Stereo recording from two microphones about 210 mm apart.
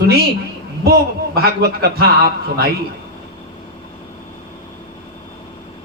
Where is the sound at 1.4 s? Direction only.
50° right (ahead or behind).